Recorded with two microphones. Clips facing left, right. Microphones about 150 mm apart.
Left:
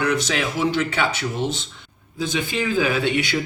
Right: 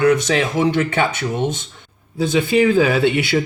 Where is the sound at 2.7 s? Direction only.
70° right (ahead or behind).